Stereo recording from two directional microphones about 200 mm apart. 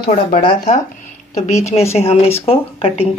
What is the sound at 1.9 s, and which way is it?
Speech, 30° left (ahead or behind).